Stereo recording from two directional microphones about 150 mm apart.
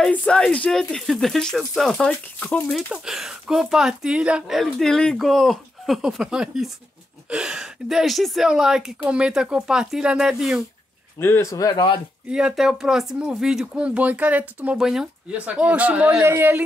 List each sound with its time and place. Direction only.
0.0 s speech: 10° left (ahead or behind)
11.1 s speech: 15° left (ahead or behind)
12.3 s speech: 5° right (ahead or behind)